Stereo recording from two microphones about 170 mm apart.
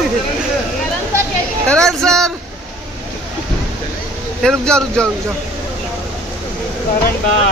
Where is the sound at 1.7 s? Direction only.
5° left (ahead or behind).